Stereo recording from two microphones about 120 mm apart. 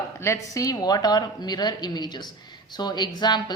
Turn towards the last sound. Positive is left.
turn(degrees=35)  # may be behind; listen again after turning